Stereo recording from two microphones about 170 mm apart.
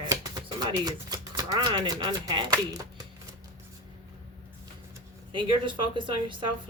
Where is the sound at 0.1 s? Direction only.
25° right (ahead or behind).